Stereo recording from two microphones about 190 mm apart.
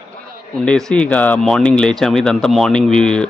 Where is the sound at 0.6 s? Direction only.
5° left (ahead or behind).